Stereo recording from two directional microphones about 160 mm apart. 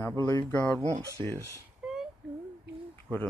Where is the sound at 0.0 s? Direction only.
10° left (ahead or behind).